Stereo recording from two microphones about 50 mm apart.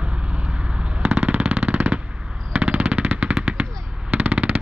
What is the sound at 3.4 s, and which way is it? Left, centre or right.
Machine gun, right.